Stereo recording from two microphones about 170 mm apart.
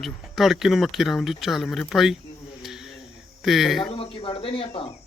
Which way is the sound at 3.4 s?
Centre (ahead or behind).